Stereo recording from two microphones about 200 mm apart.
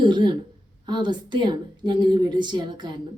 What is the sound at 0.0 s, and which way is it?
A woman's voice, 20° right (ahead or behind).